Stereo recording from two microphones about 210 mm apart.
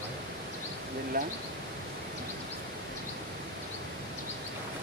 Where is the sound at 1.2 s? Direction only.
45° right (ahead or behind).